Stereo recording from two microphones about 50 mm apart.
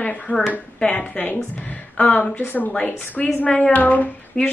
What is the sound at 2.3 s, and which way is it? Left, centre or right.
Speech, left.